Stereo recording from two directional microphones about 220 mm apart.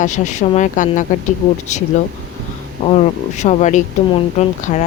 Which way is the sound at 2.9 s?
30° left (ahead or behind).